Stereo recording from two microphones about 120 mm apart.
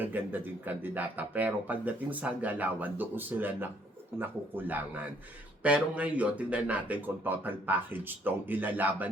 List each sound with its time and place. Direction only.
0.0 s speech: 15° right (ahead or behind)